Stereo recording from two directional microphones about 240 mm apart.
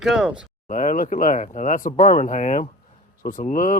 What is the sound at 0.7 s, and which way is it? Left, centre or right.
Speech, left.